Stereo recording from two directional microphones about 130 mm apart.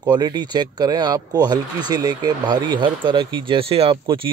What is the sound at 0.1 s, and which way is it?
Speech, 35° right (ahead or behind).